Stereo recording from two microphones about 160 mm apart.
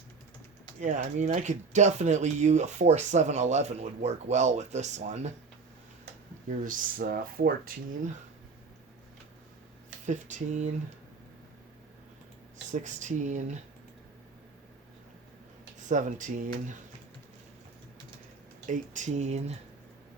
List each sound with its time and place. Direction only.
0.8 s speech: 50° right (ahead or behind)
6.6 s speech: 55° right (ahead or behind)
10.1 s speech: 50° right (ahead or behind)
12.7 s speech: 50° right (ahead or behind)
15.8 s speech: 50° right (ahead or behind)
18.6 s speech: 50° right (ahead or behind)